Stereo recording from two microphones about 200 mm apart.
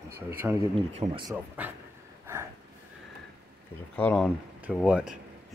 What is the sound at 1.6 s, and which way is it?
Speech, 10° right (ahead or behind).